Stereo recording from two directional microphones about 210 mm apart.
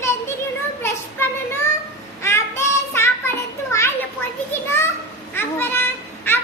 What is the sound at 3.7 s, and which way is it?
Children playing, 10° left (ahead or behind).